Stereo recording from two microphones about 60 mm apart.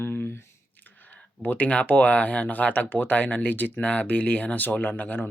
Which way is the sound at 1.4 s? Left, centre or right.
Left.